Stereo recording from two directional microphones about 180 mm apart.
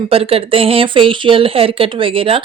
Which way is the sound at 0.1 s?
30° right (ahead or behind).